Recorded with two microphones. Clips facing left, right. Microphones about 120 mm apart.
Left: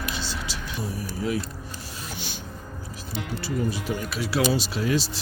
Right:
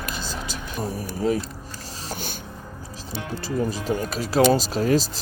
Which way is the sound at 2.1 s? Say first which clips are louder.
Right 6 dB; 45° right (ahead or behind).